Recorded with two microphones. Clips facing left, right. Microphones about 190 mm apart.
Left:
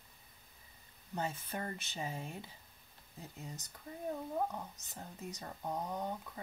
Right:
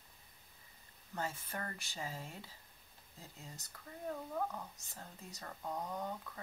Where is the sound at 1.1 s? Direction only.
20° left (ahead or behind).